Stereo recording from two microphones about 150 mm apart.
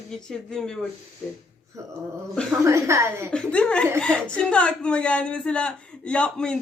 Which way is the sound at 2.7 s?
20° right (ahead or behind).